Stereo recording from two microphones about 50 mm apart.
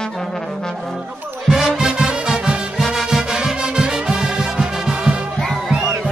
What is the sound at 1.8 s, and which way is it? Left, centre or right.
Music, centre.